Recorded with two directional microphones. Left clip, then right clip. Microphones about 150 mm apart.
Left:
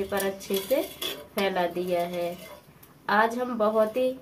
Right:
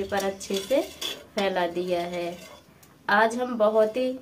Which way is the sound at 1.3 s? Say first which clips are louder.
Right 1 dB; 20° right (ahead or behind).